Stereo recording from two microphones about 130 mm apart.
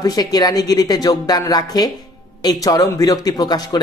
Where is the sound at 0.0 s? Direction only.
30° left (ahead or behind).